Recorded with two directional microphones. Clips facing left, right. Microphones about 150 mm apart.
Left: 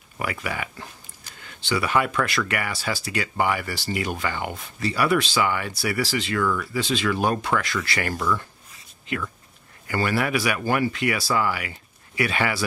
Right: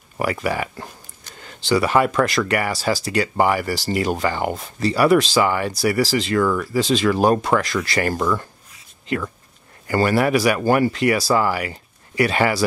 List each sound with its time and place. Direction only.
0.2 s speech: 35° right (ahead or behind)
9.8 s speech: 40° right (ahead or behind)